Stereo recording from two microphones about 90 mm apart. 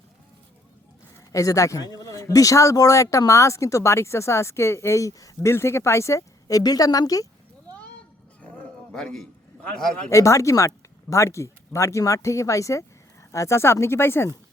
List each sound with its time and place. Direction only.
1.3 s a man's voice: 35° left (ahead or behind)
8.9 s a man's voice: 10° left (ahead or behind)
10.1 s a man's voice: 35° left (ahead or behind)